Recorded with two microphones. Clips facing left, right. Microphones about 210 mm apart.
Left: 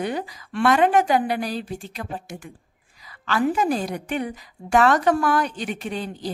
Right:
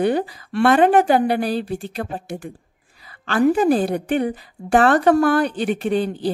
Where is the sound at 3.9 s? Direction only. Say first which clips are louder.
Right 7 dB; 35° right (ahead or behind).